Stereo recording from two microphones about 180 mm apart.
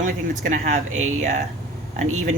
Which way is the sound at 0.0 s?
45° right (ahead or behind).